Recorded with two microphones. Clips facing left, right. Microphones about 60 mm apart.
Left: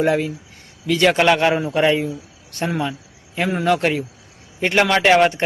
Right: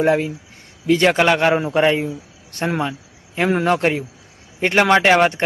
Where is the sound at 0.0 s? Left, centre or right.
Centre.